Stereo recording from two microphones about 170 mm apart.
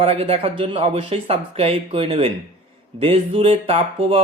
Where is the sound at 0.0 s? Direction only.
35° right (ahead or behind).